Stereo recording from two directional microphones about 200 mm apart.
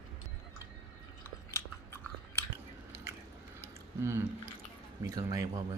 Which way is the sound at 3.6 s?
10° right (ahead or behind).